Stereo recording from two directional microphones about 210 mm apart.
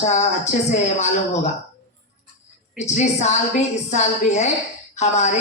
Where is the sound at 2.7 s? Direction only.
35° left (ahead or behind).